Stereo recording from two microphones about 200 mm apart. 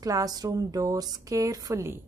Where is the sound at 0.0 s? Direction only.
20° right (ahead or behind).